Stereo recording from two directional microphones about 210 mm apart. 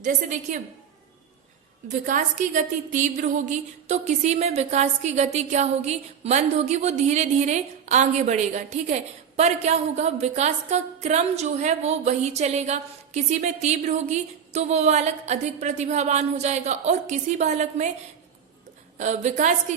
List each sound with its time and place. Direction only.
0.0 s music: 35° right (ahead or behind)
1.9 s music: 40° right (ahead or behind)
18.9 s music: 35° right (ahead or behind)